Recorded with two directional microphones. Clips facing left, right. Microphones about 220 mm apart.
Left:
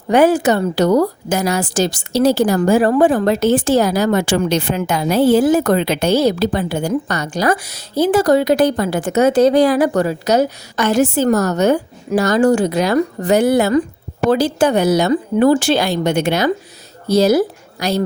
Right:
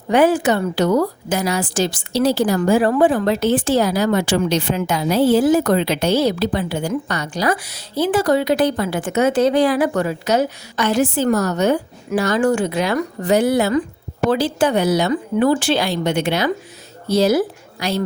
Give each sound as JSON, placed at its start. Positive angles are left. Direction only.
{"t": 0.1, "sound": "a woman's voice", "side_deg": 40}